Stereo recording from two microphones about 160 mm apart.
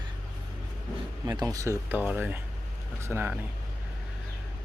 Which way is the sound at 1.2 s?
20° right (ahead or behind).